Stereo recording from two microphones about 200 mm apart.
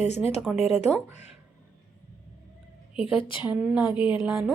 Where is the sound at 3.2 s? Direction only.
25° left (ahead or behind).